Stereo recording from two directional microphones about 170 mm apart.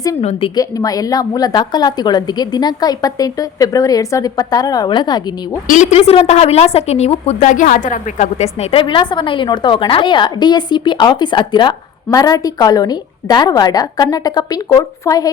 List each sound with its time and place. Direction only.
0.2 s a woman's voice: 35° left (ahead or behind)
0.5 s a woman's voice: 20° left (ahead or behind)
5.6 s a woman's voice: 45° left (ahead or behind); by 15.3 s 20° left (ahead or behind)